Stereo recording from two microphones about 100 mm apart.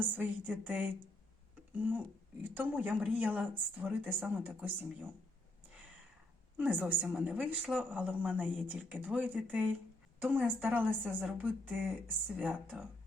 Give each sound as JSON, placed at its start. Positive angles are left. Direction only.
{"t": 0.2, "sound": "speech", "side_deg": -15}
{"t": 6.6, "sound": "speech", "side_deg": -15}
{"t": 7.8, "sound": "speech", "side_deg": -15}